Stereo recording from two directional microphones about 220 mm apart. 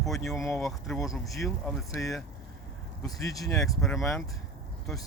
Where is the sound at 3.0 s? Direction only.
15° left (ahead or behind).